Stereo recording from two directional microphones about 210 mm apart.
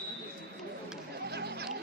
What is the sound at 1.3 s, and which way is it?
Chatter, 50° right (ahead or behind).